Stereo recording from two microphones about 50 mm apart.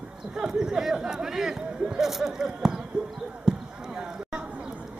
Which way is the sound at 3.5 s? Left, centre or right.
Centre.